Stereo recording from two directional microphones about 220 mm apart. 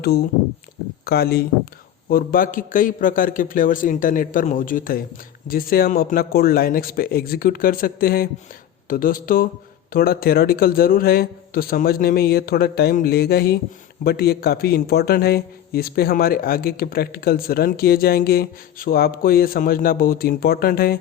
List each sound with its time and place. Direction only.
0.0 s a man's voice: 45° left (ahead or behind)